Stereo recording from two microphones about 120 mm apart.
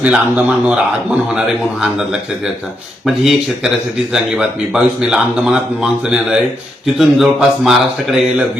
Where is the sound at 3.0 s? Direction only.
Centre (ahead or behind).